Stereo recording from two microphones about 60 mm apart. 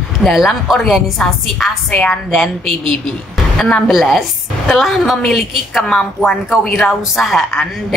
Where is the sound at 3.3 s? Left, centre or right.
Centre.